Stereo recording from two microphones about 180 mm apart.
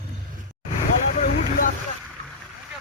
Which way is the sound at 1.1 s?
45° left (ahead or behind).